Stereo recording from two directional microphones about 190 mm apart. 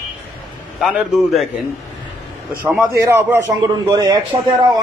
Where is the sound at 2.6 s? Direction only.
10° right (ahead or behind).